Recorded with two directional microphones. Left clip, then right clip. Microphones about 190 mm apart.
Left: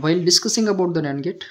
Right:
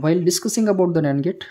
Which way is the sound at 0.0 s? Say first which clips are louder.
Left 2 dB; 20° right (ahead or behind).